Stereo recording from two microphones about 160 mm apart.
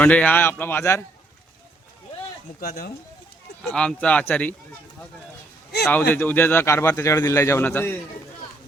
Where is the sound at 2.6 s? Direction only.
65° left (ahead or behind).